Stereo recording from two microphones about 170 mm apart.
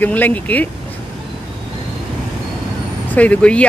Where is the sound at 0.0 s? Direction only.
10° left (ahead or behind).